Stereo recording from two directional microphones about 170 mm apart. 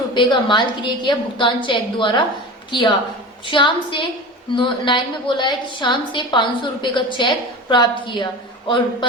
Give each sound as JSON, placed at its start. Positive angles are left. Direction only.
{"t": 0.1, "sound": "a woman's voice", "side_deg": 25}
{"t": 3.4, "sound": "a woman's voice", "side_deg": 30}